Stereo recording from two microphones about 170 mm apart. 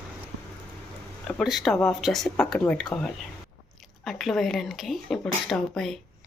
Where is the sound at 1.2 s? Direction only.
Centre (ahead or behind).